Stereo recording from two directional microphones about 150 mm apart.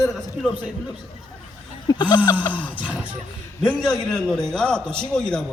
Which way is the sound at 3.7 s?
5° left (ahead or behind).